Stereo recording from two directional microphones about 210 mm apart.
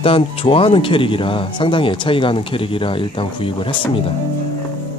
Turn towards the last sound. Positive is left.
turn(degrees=25)  # may be behind; listen again after turning